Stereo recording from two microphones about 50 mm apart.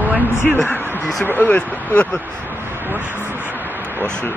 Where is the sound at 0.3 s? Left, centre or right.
Left.